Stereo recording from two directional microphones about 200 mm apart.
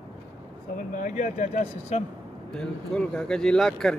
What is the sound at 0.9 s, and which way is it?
Speech, 40° left (ahead or behind).